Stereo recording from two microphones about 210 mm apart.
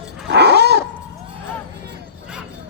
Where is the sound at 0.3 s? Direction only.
55° right (ahead or behind).